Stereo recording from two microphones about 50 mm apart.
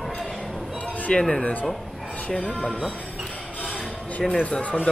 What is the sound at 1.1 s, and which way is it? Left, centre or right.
Speech, left.